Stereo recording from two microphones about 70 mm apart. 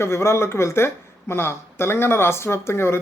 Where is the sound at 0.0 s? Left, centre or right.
Left.